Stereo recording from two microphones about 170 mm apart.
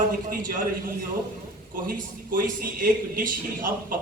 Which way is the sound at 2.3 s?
55° right (ahead or behind).